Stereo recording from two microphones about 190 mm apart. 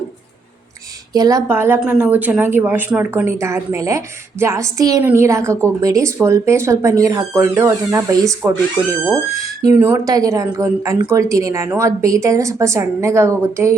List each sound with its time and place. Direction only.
1.1 s a woman's voice: 20° right (ahead or behind)